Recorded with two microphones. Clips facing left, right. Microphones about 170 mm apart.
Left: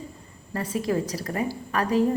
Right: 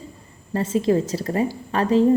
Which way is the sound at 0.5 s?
25° right (ahead or behind).